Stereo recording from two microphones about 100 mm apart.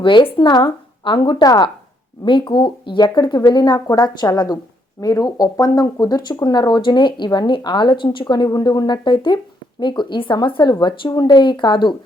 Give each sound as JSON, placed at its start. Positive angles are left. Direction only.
{"t": 0.0, "sound": "speech", "side_deg": 55}